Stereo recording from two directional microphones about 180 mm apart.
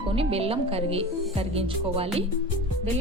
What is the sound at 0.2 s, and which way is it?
Speech, 35° right (ahead or behind).